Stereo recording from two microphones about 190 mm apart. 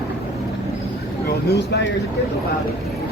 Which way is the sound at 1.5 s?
60° left (ahead or behind).